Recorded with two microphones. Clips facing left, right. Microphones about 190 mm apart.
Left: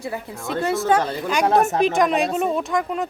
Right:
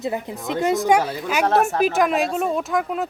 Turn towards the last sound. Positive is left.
turn(degrees=0)  # may be behind; listen again after turning